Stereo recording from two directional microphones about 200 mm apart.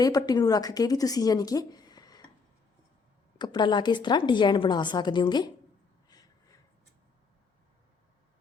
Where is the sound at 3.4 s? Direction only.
20° left (ahead or behind).